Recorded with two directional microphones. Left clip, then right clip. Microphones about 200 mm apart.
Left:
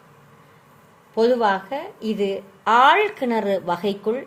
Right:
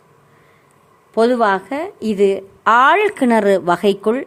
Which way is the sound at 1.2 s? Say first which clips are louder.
Right 4 dB; 60° right (ahead or behind).